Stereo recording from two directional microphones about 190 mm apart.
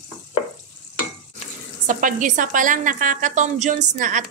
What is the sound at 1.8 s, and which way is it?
A woman's voice, 45° right (ahead or behind).